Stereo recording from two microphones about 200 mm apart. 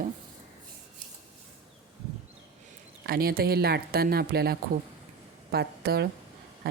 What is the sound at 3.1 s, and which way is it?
Speech, 50° right (ahead or behind).